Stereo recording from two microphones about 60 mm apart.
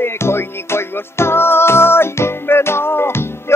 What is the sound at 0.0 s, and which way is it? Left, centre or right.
Music, left.